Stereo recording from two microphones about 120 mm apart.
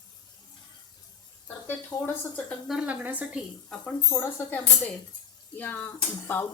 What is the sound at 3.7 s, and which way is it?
Speech, 5° left (ahead or behind).